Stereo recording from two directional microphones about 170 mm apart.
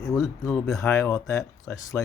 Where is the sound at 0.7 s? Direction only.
15° left (ahead or behind).